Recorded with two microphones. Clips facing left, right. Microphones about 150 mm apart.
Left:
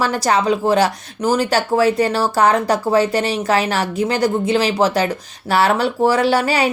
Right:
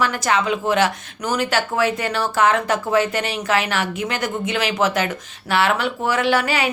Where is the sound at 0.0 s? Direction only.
35° left (ahead or behind).